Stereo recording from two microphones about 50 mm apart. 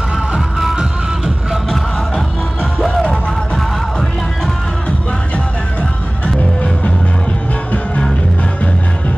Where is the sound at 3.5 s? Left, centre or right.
Centre.